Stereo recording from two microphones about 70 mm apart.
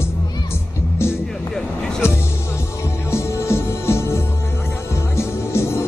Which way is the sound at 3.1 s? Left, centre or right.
Left.